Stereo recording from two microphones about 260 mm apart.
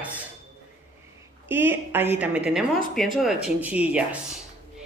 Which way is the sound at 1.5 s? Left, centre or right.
Centre.